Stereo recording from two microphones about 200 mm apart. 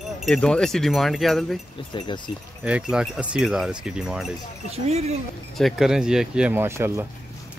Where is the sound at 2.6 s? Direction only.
5° right (ahead or behind).